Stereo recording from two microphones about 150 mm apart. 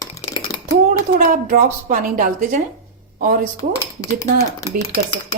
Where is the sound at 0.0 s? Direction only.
30° left (ahead or behind).